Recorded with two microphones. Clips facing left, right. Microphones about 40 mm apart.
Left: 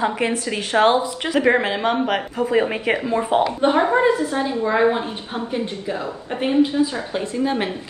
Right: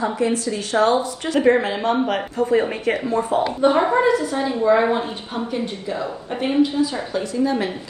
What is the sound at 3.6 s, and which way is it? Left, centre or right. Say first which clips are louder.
A woman's voice: right 3 dB; left.